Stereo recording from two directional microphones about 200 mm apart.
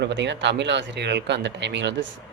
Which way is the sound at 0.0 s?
60° right (ahead or behind).